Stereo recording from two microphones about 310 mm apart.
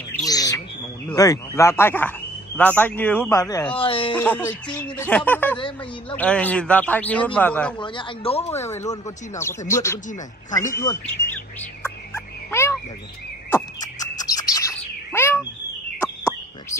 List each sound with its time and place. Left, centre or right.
0.1 s bird: centre
1.1 s a man's voice: centre
4.1 s speech: centre
7.8 s a man's voice: centre
8.6 s a man's voice: centre
10.6 s bird: centre
13.5 s a sound: centre
14.2 s bird: centre
15.1 s owl: centre